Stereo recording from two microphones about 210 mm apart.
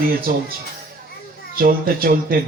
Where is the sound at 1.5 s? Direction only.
45° right (ahead or behind).